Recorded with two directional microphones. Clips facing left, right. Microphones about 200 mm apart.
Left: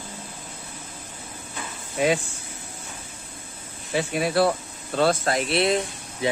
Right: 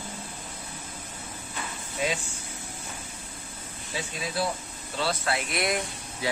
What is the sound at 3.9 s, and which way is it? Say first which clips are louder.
Speech: left 10 dB; 65° left (ahead or behind).